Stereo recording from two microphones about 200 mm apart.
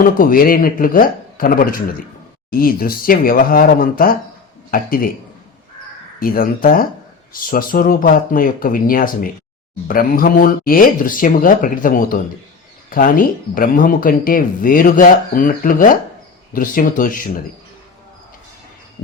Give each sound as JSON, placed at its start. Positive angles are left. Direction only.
{"t": 0.0, "sound": "speech", "side_deg": 45}
{"t": 6.1, "sound": "speech", "side_deg": 45}